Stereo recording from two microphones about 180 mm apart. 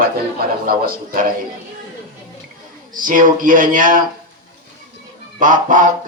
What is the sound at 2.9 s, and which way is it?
A man's voice, 50° right (ahead or behind).